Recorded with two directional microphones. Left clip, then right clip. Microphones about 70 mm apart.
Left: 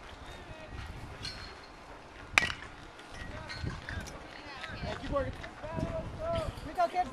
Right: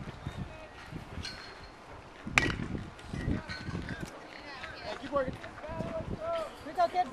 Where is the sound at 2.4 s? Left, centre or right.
Centre.